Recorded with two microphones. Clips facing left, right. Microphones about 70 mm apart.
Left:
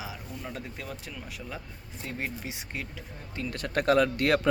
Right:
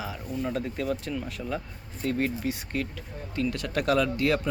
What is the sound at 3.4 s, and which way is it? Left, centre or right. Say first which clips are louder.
Speech: left 1 dB; left.